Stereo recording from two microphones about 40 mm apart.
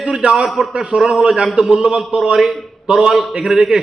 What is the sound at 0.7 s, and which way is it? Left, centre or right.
A man's voice, right.